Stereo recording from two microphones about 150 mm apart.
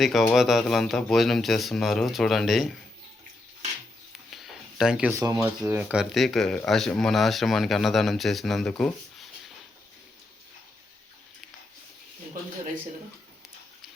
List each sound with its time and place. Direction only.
0.0 s speech: centre (ahead or behind)
4.3 s a sound: centre (ahead or behind)
5.1 s speech: 20° right (ahead or behind)
5.4 s speech: 10° right (ahead or behind)